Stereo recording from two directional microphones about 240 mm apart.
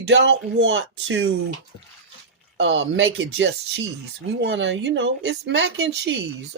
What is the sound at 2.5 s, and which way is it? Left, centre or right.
Speech, right.